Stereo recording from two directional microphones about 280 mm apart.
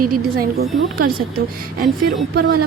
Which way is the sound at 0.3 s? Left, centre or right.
Right.